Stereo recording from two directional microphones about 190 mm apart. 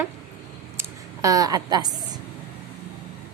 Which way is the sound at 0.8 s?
15° right (ahead or behind).